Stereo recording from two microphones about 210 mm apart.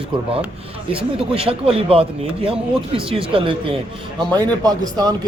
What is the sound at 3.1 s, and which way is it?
Speech, 25° right (ahead or behind).